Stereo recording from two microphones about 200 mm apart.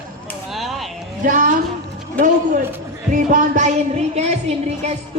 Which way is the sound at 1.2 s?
40° right (ahead or behind).